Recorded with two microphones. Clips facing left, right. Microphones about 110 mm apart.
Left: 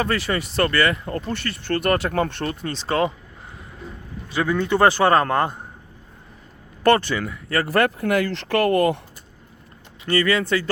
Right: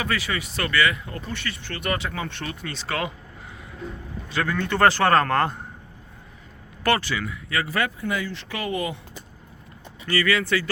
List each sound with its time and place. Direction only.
0.0 s speech: 35° left (ahead or behind)
4.4 s a man's voice: 15° left (ahead or behind)
7.2 s speech: 40° left (ahead or behind)
7.7 s speech: 60° left (ahead or behind)
10.1 s speech: 30° left (ahead or behind)